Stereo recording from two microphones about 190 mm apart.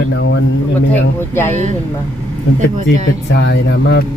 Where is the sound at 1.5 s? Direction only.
40° right (ahead or behind).